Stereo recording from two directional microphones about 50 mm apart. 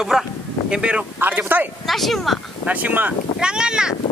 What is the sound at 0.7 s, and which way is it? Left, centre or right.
Speech, right.